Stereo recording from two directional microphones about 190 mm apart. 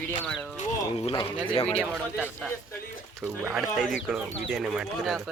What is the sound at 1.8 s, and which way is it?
Speech, 5° right (ahead or behind).